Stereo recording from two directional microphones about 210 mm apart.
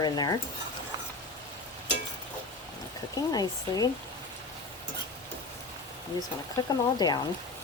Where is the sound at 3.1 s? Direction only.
15° left (ahead or behind).